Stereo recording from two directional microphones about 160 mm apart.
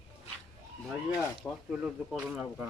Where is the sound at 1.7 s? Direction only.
5° right (ahead or behind).